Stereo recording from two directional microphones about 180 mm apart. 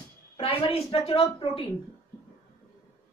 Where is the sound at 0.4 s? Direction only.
30° left (ahead or behind).